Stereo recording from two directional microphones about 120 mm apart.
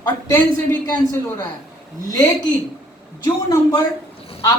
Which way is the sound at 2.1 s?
30° left (ahead or behind).